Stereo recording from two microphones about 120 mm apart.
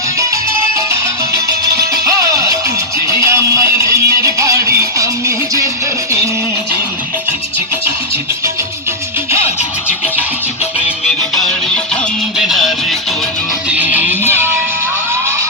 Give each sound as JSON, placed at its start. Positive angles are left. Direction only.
{"t": 2.0, "sound": "music", "side_deg": -30}
{"t": 11.0, "sound": "music", "side_deg": 5}
{"t": 13.7, "sound": "music", "side_deg": -15}